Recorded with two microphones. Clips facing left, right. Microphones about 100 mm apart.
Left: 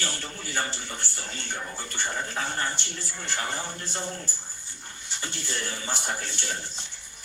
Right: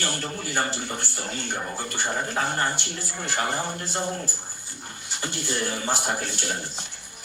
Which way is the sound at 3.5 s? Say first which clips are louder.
Right 5 dB; 45° right (ahead or behind).